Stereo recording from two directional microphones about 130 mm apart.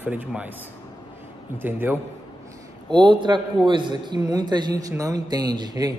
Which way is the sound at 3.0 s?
35° right (ahead or behind).